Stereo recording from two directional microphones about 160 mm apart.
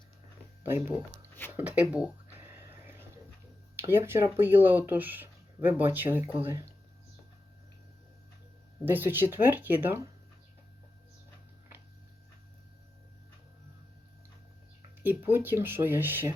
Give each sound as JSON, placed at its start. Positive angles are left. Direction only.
{"t": 1.5, "sound": "speech", "side_deg": -10}
{"t": 2.3, "sound": "a sound", "side_deg": -15}
{"t": 3.8, "sound": "speech", "side_deg": -15}
{"t": 8.8, "sound": "speech", "side_deg": -10}
{"t": 15.0, "sound": "speech", "side_deg": -15}